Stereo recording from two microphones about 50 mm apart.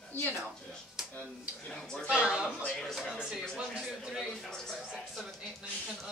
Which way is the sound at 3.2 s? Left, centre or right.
Centre.